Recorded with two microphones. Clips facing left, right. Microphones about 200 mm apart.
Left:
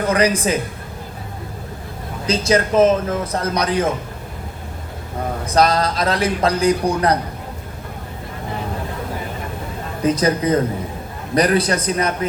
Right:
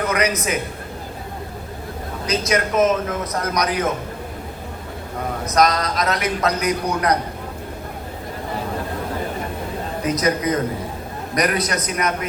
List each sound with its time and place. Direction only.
0.1 s speech: 30° left (ahead or behind)
2.2 s a man's voice: 30° left (ahead or behind)
5.5 s a man's voice: 30° left (ahead or behind)
10.0 s a man's voice: 30° left (ahead or behind)